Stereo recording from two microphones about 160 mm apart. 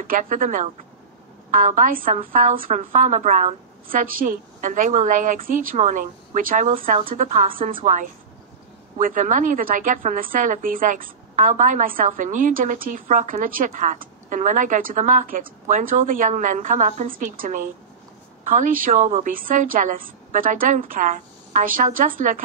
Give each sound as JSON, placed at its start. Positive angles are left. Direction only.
{"t": 0.0, "sound": "a woman's voice", "side_deg": -55}
{"t": 19.3, "sound": "a woman's voice", "side_deg": -60}